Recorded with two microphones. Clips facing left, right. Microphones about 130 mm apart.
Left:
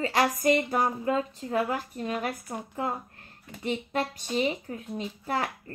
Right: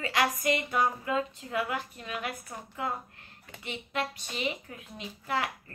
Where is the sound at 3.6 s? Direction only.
40° left (ahead or behind).